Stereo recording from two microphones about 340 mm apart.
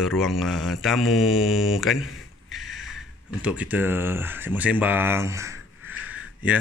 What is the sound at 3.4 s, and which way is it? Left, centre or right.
Speech, centre.